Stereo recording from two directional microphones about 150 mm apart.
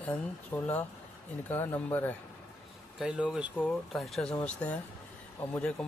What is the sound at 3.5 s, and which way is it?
Speech, 5° left (ahead or behind).